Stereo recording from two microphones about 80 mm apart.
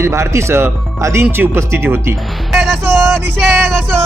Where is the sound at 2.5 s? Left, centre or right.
Centre.